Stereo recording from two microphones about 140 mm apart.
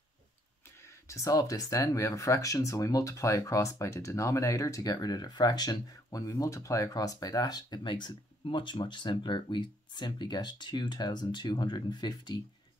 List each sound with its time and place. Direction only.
1.0 s speech: 20° left (ahead or behind)